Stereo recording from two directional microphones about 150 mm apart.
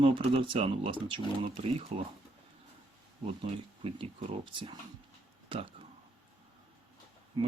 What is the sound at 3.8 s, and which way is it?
Speech, 35° right (ahead or behind).